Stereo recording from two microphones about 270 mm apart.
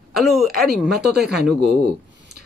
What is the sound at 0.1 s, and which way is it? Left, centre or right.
Speech, centre.